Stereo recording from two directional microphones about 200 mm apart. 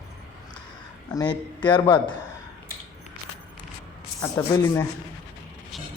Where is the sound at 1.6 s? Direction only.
25° left (ahead or behind).